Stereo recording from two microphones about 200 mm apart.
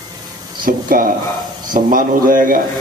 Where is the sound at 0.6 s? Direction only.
45° right (ahead or behind).